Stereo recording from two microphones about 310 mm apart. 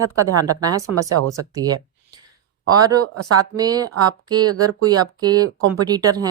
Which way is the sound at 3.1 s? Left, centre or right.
Right.